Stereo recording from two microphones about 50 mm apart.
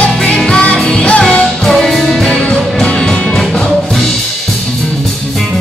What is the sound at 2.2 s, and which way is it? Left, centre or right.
Music, left.